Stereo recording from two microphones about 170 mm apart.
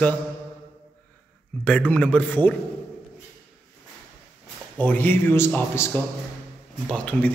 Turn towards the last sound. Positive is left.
turn(degrees=5)  # may be behind; listen again after turning